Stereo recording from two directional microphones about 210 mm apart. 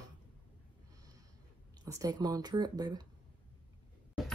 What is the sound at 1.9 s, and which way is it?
Speech, 15° right (ahead or behind).